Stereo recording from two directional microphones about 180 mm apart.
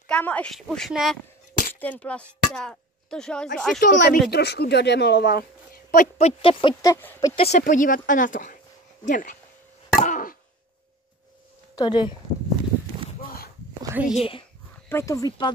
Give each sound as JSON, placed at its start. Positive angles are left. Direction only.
{"t": 0.0, "sound": "a woman's voice", "side_deg": 10}
{"t": 3.8, "sound": "speech", "side_deg": 75}
{"t": 4.3, "sound": "speech", "side_deg": 65}
{"t": 5.9, "sound": "speech", "side_deg": 40}
{"t": 6.7, "sound": "speech", "side_deg": 15}
{"t": 7.3, "sound": "speech", "side_deg": 35}
{"t": 10.0, "sound": "a sound", "side_deg": 45}
{"t": 11.7, "sound": "speech", "side_deg": 25}
{"t": 13.9, "sound": "a woman's voice", "side_deg": -5}
{"t": 14.9, "sound": "speech", "side_deg": 15}